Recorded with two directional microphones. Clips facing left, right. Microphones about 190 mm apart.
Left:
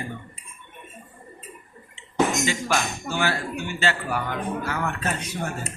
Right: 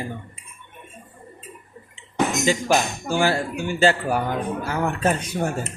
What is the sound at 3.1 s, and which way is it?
Speech, 35° right (ahead or behind).